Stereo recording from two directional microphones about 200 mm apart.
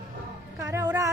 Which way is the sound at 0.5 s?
15° right (ahead or behind).